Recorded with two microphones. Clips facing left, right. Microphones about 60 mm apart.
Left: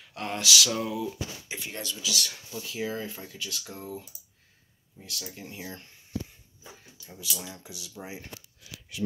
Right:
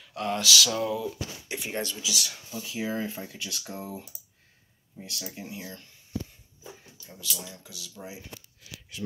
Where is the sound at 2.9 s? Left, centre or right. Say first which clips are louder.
Right 3 dB; right.